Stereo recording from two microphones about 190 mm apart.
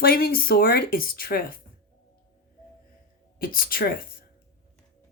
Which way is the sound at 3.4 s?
50° left (ahead or behind).